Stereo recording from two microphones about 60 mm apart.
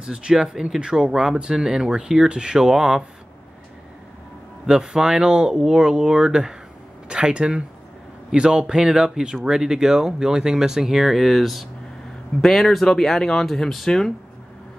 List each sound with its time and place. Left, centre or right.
0.0 s speech: centre
4.6 s speech: centre